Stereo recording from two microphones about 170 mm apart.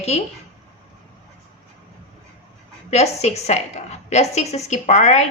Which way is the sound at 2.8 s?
40° left (ahead or behind).